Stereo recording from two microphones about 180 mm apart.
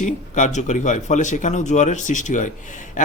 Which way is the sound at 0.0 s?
40° left (ahead or behind).